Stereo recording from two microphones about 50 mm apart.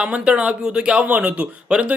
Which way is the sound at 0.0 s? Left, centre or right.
Right.